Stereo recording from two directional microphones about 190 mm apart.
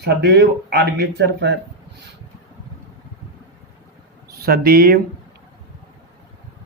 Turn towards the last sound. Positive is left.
turn(degrees=-50)  # may be behind; listen again after turning